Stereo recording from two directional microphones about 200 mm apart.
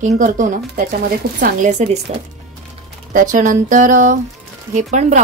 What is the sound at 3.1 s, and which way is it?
Speech, 40° right (ahead or behind).